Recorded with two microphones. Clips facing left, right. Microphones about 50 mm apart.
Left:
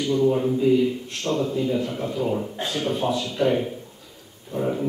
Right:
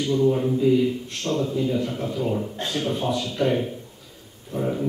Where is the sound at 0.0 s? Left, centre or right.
Centre.